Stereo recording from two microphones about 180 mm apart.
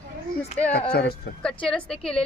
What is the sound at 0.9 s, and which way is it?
Speech, 60° left (ahead or behind).